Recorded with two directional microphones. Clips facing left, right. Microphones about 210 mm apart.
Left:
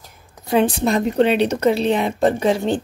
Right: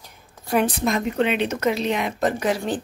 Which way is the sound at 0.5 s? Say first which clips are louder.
Left 4 dB; 25° left (ahead or behind).